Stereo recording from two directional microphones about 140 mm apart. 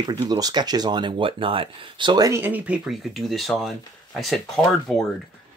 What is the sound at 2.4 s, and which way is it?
Speech, 10° right (ahead or behind).